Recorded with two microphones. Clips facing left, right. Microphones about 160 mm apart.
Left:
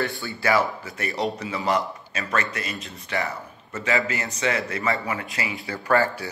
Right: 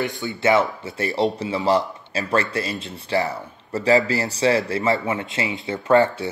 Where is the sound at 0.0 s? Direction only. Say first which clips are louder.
Right 4 dB; 20° right (ahead or behind).